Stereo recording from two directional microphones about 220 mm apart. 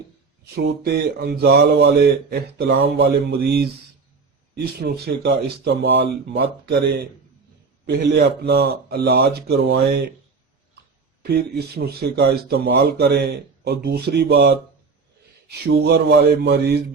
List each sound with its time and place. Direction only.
0.8 s speech: 45° right (ahead or behind)
8.1 s speech: 50° right (ahead or behind)
11.2 s speech: 45° right (ahead or behind)
15.8 s speech: 50° right (ahead or behind)